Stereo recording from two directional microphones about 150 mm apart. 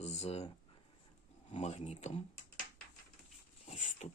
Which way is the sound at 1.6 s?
50° left (ahead or behind).